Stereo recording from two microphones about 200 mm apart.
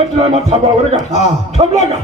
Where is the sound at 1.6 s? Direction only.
35° right (ahead or behind).